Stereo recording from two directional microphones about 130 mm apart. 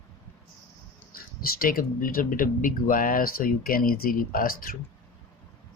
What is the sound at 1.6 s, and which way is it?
Speech, 90° left.